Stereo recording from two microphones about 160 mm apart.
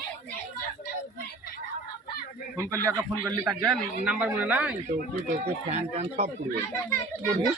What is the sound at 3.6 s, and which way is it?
Speech, 5° right (ahead or behind).